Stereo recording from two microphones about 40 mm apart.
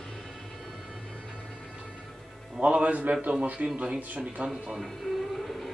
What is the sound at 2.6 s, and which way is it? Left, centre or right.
A man's voice, right.